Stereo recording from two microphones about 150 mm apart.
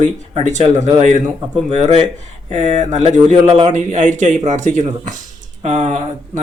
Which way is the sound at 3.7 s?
55° right (ahead or behind).